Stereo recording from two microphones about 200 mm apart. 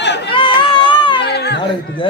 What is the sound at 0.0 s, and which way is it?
Chatter, 60° left (ahead or behind).